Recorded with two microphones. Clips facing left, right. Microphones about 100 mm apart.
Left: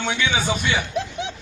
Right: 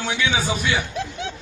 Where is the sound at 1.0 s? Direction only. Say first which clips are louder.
Left 2 dB; 20° left (ahead or behind).